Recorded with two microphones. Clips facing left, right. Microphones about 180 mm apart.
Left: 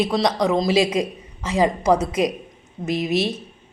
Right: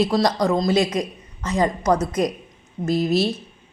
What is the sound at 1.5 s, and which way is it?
Speech, 5° left (ahead or behind).